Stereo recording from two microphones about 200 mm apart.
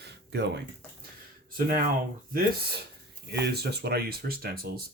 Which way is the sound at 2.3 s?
50° right (ahead or behind).